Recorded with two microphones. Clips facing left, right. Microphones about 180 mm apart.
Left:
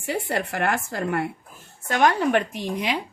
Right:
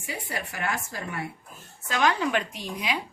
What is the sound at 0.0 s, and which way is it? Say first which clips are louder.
Speech: left 8 dB; 65° left (ahead or behind).